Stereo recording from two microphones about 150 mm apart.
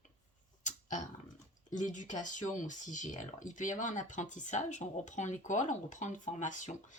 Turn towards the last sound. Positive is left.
turn(degrees=55)  # may be behind; listen again after turning